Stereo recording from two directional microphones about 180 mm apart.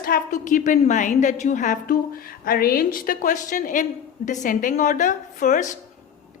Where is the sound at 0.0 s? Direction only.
50° left (ahead or behind).